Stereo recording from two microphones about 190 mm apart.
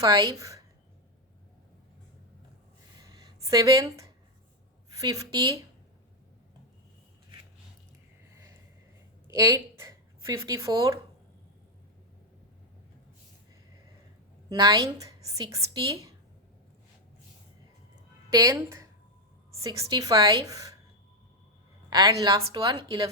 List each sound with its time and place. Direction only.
0.0 s a woman's voice: 20° right (ahead or behind)
3.1 s a sound: 20° right (ahead or behind)
4.9 s a woman's voice: 20° right (ahead or behind)
9.2 s speech: 15° right (ahead or behind)
14.5 s a woman's voice: 20° right (ahead or behind)
18.3 s a woman's voice: 20° right (ahead or behind)
21.8 s a woman's voice: 20° right (ahead or behind)